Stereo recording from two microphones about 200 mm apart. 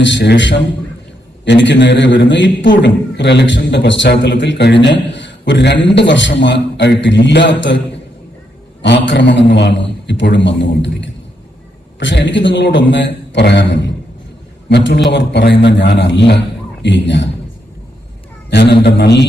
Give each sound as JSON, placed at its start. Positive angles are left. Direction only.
{"t": 0.0, "sound": "a man's voice", "side_deg": 60}
{"t": 18.5, "sound": "a man's voice", "side_deg": 55}